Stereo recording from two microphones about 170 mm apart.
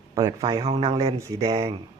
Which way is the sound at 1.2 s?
20° right (ahead or behind).